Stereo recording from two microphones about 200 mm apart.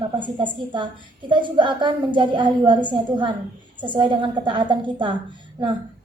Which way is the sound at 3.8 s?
25° right (ahead or behind).